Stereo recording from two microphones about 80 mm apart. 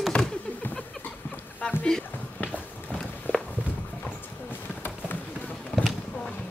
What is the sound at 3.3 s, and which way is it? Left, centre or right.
Walk, left.